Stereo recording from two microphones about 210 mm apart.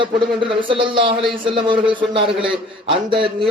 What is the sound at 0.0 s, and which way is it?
A man's voice, 25° right (ahead or behind).